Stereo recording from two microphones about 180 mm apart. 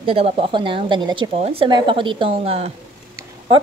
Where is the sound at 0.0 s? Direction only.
30° right (ahead or behind).